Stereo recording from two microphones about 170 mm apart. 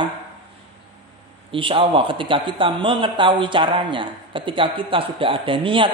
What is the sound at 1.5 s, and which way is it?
Speech, 30° right (ahead or behind).